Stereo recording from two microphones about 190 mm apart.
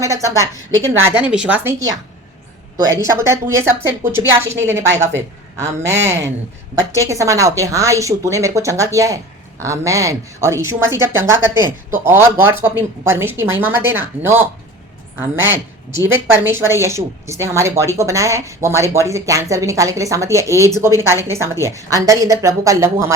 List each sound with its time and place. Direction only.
0.0 s speech: 15° right (ahead or behind)
2.7 s speech: 20° right (ahead or behind)
16.5 s speech: 15° right (ahead or behind)